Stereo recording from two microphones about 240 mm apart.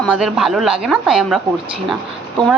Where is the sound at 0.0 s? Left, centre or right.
Centre.